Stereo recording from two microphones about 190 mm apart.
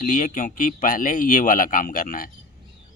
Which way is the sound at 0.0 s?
45° left (ahead or behind).